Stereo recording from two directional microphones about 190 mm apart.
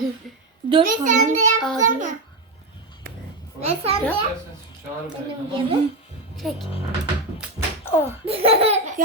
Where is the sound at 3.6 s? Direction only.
30° right (ahead or behind).